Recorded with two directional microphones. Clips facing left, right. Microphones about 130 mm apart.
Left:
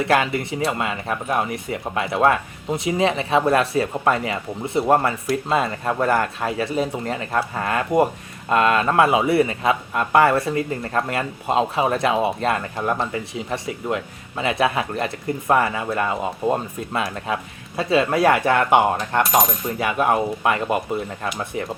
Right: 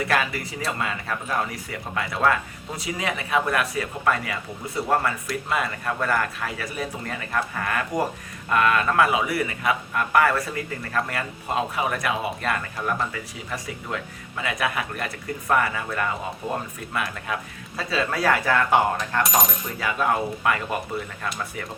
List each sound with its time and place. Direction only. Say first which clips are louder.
0.0 s speech: left 5 dB; 25° left (ahead or behind)